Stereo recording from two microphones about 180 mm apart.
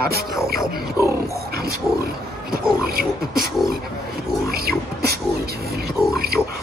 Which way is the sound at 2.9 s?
55° right (ahead or behind).